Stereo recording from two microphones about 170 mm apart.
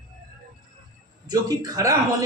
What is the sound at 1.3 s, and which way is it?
Speech, 20° right (ahead or behind).